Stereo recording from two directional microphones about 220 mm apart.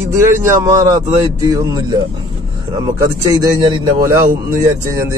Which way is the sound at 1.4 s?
15° right (ahead or behind).